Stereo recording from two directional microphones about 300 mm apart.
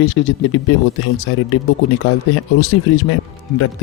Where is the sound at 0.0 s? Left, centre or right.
Left.